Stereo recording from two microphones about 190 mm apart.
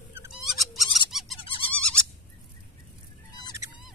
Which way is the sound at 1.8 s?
5° left (ahead or behind).